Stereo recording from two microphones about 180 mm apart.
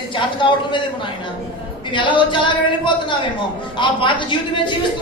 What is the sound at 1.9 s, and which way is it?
A man's voice, 25° left (ahead or behind).